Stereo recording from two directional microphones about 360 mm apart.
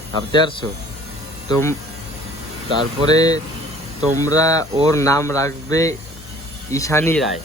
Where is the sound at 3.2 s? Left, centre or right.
Centre.